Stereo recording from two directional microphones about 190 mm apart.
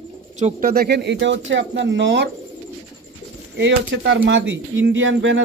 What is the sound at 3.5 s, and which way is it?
Speech, 65° right (ahead or behind).